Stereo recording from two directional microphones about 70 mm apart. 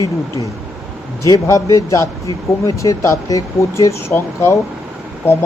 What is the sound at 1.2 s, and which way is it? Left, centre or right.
Speech, left.